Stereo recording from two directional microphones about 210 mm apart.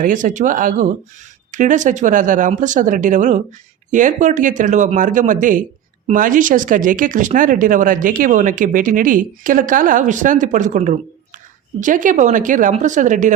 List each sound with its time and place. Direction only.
0.0 s speech: 40° right (ahead or behind)